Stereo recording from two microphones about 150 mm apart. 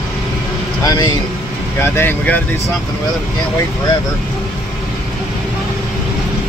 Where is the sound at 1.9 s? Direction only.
10° left (ahead or behind).